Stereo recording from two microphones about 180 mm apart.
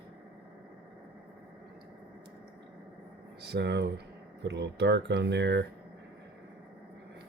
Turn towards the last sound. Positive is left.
turn(degrees=-75)  # may be behind; listen again after turning